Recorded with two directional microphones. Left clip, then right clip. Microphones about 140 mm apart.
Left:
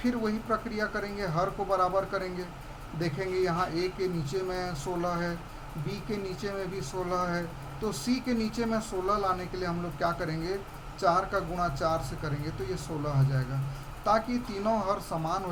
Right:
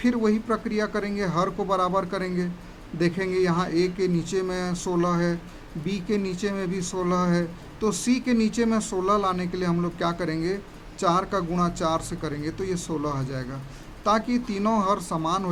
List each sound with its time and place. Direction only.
0.0 s speech: 35° right (ahead or behind)